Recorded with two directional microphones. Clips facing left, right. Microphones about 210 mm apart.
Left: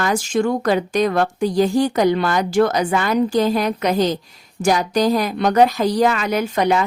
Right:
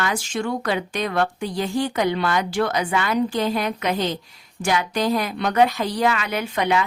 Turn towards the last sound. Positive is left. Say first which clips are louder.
# left 4 dB
turn(degrees=40)  # may be behind; listen again after turning